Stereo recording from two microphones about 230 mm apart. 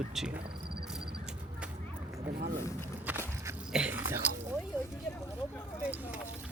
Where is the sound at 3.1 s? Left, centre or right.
Centre.